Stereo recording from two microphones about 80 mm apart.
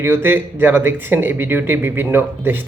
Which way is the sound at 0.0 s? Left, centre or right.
Right.